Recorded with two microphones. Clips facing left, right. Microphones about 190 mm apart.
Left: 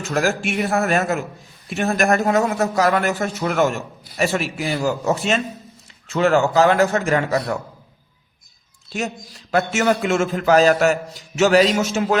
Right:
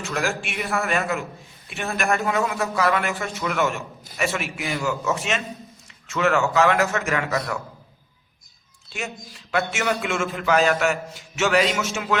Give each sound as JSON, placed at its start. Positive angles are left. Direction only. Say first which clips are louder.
{"t": 0.0, "sound": "a man's voice", "louder": "left 6 dB", "side_deg": 40}
{"t": 8.9, "sound": "a man's voice", "louder": "left 6 dB", "side_deg": 40}